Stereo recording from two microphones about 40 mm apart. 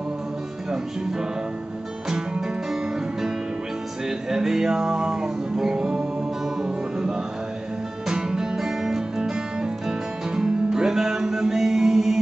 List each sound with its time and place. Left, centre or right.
2.0 s music: centre